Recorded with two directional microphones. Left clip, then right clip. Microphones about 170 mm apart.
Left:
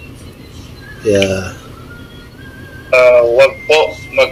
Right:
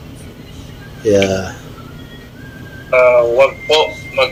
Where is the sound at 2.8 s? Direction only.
20° left (ahead or behind).